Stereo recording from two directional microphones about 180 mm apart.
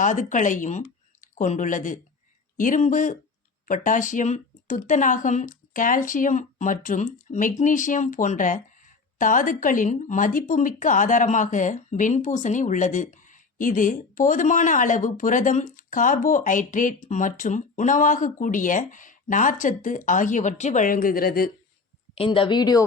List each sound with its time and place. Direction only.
0.0 s speech: 45° left (ahead or behind)
22.1 s speech: 30° left (ahead or behind)